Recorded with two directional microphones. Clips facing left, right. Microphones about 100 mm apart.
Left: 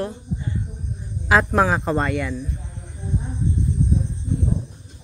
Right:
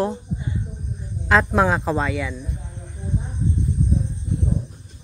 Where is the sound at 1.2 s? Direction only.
5° left (ahead or behind).